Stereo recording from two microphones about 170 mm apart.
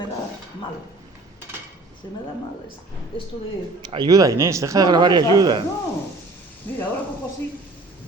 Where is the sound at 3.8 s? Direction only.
25° right (ahead or behind).